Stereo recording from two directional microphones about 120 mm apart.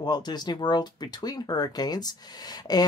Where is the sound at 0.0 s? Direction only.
35° left (ahead or behind).